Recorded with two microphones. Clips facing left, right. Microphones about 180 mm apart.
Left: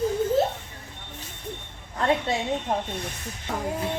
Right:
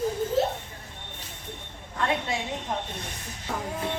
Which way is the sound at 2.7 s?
40° left (ahead or behind).